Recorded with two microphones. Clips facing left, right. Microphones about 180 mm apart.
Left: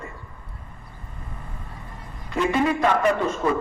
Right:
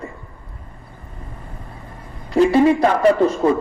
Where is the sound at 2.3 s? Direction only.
35° right (ahead or behind).